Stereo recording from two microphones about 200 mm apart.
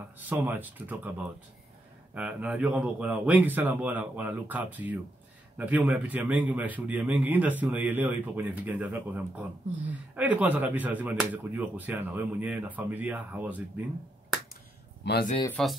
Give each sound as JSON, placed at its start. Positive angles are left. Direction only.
{"t": 0.3, "sound": "speech", "side_deg": -10}
{"t": 2.1, "sound": "speech", "side_deg": -5}
{"t": 15.0, "sound": "speech", "side_deg": 60}
{"t": 15.6, "sound": "speech", "side_deg": 0}